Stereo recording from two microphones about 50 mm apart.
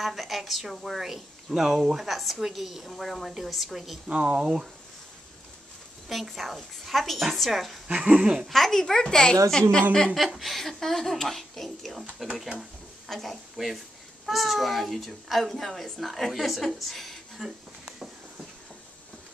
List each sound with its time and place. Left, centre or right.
0.0 s a child's voice: centre
4.1 s speech: right
6.0 s a child's voice: centre
7.9 s speech: right
8.5 s speech: centre
10.3 s a child's voice: centre
17.4 s a sound: centre